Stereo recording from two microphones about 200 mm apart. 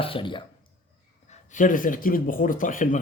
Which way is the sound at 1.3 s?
40° left (ahead or behind).